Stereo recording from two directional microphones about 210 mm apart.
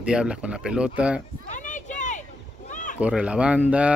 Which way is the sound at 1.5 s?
35° left (ahead or behind).